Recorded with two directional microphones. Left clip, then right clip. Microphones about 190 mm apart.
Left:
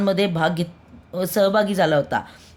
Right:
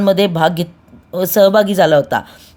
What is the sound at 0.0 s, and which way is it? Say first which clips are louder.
Speech: right 8 dB; 30° right (ahead or behind).